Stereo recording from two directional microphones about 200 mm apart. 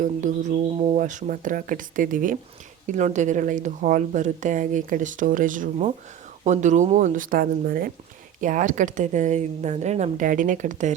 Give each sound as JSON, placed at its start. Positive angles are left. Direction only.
{"t": 0.0, "sound": "a woman's voice", "side_deg": -40}